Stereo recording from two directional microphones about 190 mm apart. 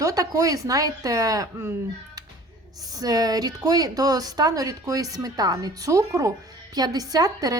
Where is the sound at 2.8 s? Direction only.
20° right (ahead or behind).